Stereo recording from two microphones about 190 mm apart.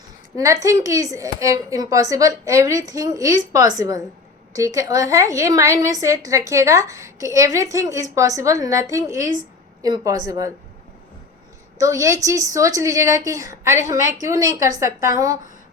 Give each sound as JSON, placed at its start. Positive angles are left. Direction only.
{"t": 0.3, "sound": "a woman's voice", "side_deg": -15}
{"t": 11.8, "sound": "a woman's voice", "side_deg": -15}